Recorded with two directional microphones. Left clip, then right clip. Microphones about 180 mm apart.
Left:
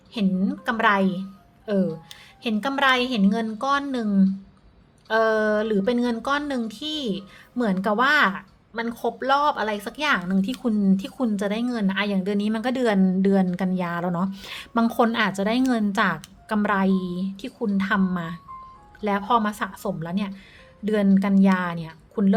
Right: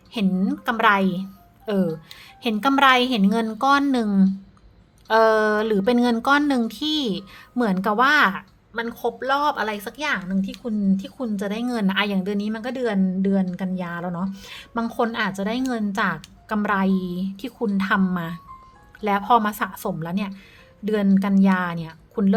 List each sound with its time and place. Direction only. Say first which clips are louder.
0.1 s a woman's voice: right 2 dB; 15° right (ahead or behind); by 10.2 s 10° left (ahead or behind)
10.2 s speech: left 3 dB; 25° left (ahead or behind); by 11.7 s centre (ahead or behind)
11.7 s a woman's voice: right 2 dB; 15° right (ahead or behind)